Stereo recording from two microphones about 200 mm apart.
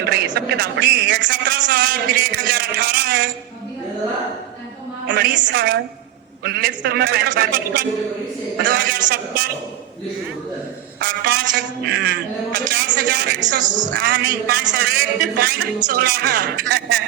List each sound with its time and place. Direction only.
0.0 s a man's voice: 50° right (ahead or behind)
5.0 s a woman's voice: 60° right (ahead or behind)
11.0 s a man's voice: 50° right (ahead or behind)
13.9 s a man's voice: 55° right (ahead or behind)